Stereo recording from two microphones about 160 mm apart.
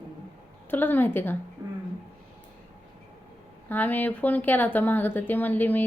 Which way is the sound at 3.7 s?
10° left (ahead or behind).